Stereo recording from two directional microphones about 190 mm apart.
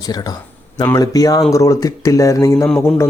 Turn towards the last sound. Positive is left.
turn(degrees=15)  # may be behind; listen again after turning